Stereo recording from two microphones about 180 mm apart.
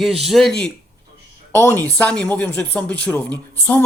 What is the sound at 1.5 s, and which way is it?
Speech, 15° left (ahead or behind).